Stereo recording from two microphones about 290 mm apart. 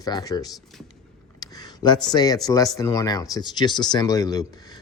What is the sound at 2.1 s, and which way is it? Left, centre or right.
Speech, centre.